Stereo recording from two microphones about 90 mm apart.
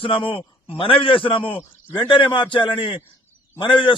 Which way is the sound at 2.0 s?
65° left (ahead or behind).